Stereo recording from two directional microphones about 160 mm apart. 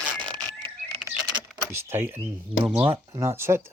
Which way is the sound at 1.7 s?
15° right (ahead or behind).